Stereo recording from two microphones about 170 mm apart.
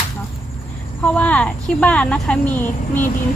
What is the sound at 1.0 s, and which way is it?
Speech, 10° left (ahead or behind).